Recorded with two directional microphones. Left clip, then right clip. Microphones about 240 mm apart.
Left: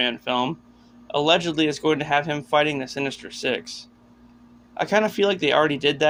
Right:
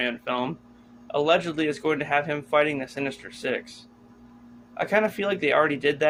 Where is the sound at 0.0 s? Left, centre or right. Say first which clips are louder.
Left 4 dB; left.